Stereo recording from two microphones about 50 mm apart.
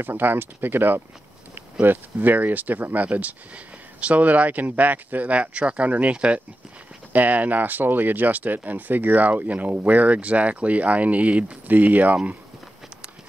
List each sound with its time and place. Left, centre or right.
0.0 s speech: right